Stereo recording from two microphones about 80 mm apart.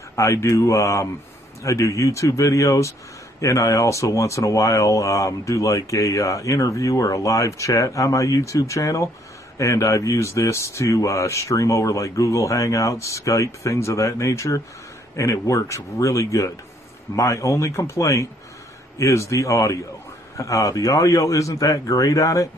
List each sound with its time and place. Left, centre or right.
0.1 s speech: left